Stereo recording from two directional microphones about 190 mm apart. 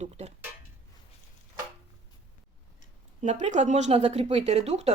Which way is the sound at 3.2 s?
40° right (ahead or behind).